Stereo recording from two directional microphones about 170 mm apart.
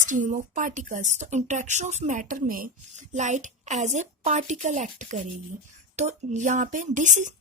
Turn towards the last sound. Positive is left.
turn(degrees=-45)  # may be behind; listen again after turning